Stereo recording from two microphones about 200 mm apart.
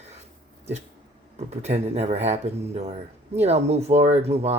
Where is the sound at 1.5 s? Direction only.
35° right (ahead or behind).